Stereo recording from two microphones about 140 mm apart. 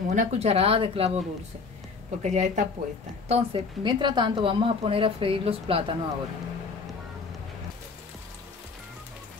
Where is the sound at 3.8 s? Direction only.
35° right (ahead or behind).